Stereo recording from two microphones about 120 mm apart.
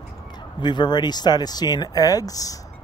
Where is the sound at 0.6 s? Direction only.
40° left (ahead or behind).